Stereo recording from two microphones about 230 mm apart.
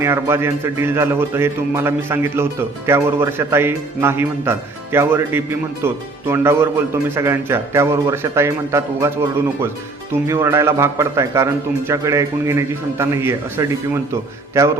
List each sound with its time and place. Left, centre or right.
0.0 s a man's voice: centre
10.2 s a man's voice: centre